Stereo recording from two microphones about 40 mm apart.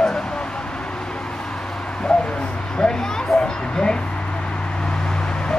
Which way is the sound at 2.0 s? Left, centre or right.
Left.